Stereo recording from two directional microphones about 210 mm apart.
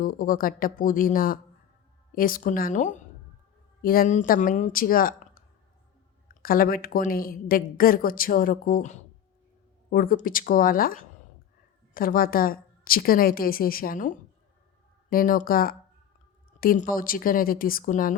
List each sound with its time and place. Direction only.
0.0 s a woman's voice: 40° left (ahead or behind)
6.4 s a woman's voice: 45° left (ahead or behind)